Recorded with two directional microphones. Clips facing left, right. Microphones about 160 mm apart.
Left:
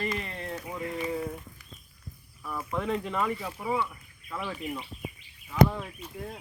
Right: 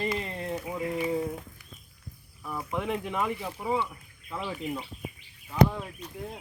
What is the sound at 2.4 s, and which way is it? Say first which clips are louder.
Speech: even; 10° right (ahead or behind).